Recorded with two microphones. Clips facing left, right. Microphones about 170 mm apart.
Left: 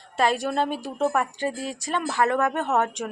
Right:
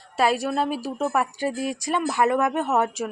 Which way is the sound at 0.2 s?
5° right (ahead or behind).